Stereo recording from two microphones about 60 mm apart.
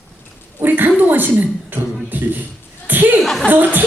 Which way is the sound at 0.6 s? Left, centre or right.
Right.